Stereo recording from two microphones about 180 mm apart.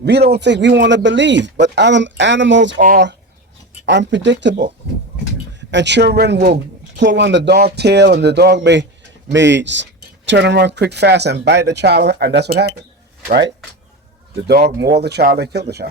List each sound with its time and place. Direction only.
0.0 s speech: 65° right (ahead or behind); by 2.8 s 90° right
2.8 s speech: 50° right (ahead or behind)
3.8 s speech: 80° right
5.5 s speech: 80° right; by 13.5 s 60° right (ahead or behind)
14.9 s speech: 65° right (ahead or behind)